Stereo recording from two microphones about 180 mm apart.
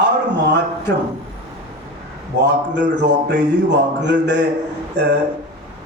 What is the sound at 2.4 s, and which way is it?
A man's voice, 75° right (ahead or behind).